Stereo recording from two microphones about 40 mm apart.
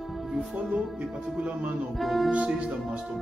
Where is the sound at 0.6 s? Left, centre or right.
Right.